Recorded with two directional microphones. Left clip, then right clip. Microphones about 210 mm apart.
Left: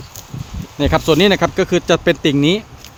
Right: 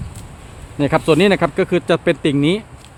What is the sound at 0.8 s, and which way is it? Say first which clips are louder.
Speech: left 1 dB; centre (ahead or behind).